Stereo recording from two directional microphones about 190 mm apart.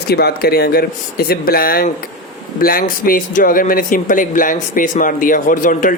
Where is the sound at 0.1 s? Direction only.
55° left (ahead or behind).